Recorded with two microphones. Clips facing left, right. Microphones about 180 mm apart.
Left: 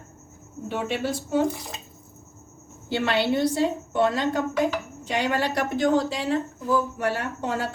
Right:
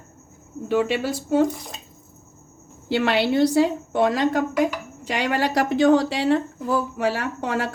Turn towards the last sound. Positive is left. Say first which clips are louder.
# right 3 dB
turn(degrees=-75)  # may be behind; listen again after turning